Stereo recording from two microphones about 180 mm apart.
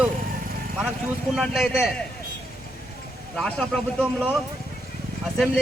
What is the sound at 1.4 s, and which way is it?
Speech, centre (ahead or behind).